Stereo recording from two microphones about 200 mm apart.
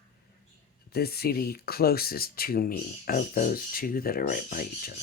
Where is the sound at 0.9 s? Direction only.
50° left (ahead or behind).